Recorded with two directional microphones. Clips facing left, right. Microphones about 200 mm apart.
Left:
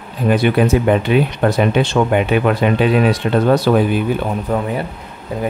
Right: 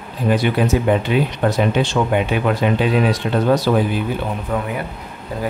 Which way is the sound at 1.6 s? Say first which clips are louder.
Left 3 dB; 60° left (ahead or behind).